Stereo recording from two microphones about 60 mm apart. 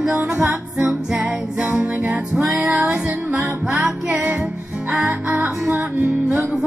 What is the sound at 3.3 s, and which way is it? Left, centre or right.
Music, centre.